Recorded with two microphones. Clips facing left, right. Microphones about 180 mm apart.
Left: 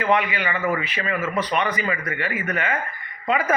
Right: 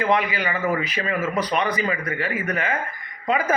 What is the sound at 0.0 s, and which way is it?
A man's voice, 35° right (ahead or behind).